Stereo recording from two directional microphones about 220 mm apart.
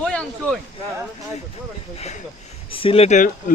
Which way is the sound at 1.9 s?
30° left (ahead or behind).